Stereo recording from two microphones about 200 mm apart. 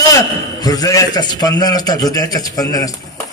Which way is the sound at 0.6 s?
20° left (ahead or behind).